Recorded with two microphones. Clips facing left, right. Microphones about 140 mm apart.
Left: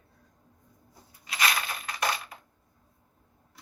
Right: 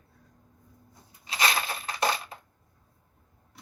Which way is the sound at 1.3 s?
30° right (ahead or behind).